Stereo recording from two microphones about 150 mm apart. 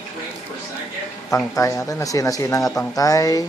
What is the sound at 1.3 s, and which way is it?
Speech, 20° left (ahead or behind).